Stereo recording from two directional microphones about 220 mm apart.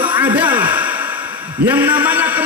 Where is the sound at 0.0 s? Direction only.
5° right (ahead or behind).